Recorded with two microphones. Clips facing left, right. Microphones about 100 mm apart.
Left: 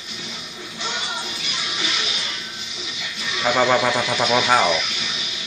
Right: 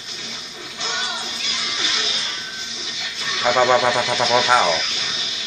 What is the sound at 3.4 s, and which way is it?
Speech, 20° right (ahead or behind).